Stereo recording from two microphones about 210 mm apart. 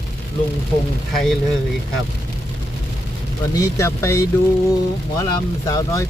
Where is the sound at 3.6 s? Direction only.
15° left (ahead or behind).